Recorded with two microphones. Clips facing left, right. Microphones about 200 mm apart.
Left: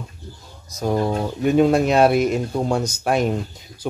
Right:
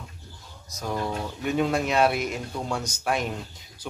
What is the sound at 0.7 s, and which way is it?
Speech, 35° left (ahead or behind).